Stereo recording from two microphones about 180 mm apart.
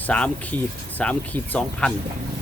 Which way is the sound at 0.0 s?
5° left (ahead or behind).